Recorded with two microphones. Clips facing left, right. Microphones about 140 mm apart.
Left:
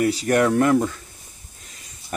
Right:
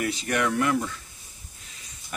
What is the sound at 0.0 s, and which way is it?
Speech, 35° left (ahead or behind).